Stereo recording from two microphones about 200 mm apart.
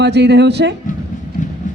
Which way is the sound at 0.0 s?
55° right (ahead or behind).